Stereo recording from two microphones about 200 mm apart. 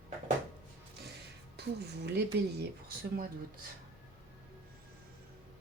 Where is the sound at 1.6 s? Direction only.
55° right (ahead or behind).